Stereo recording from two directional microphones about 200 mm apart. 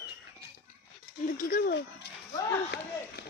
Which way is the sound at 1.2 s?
45° left (ahead or behind).